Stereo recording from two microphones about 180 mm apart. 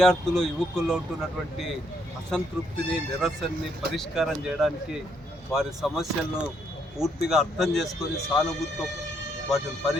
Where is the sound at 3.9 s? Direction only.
Centre (ahead or behind).